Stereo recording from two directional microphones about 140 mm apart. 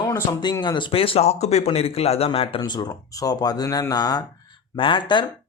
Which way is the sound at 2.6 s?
30° left (ahead or behind).